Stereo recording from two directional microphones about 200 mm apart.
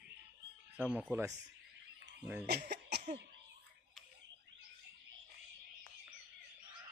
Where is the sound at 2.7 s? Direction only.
55° right (ahead or behind).